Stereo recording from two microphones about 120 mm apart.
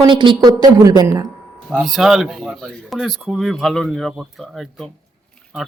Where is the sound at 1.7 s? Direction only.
Centre (ahead or behind).